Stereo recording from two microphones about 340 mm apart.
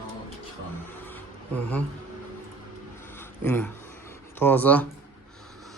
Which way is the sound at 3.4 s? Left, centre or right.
Centre.